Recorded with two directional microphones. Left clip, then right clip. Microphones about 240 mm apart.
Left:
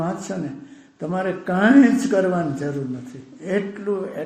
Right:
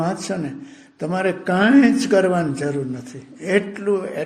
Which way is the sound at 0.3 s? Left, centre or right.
Right.